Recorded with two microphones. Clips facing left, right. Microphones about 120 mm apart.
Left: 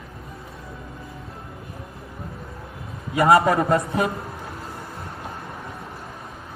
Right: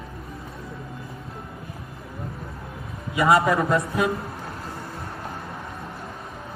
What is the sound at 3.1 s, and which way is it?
Speech, 55° left (ahead or behind).